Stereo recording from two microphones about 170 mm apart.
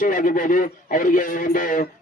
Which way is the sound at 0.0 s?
50° left (ahead or behind).